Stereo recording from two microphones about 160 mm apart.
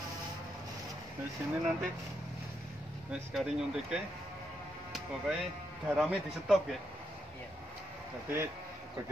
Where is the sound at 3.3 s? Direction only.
5° right (ahead or behind).